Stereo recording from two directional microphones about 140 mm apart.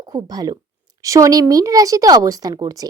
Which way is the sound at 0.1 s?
30° right (ahead or behind).